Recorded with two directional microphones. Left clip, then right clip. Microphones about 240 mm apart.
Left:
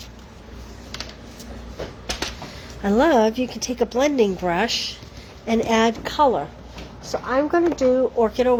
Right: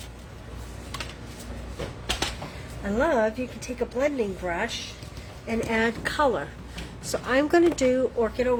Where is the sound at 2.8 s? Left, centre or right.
Left.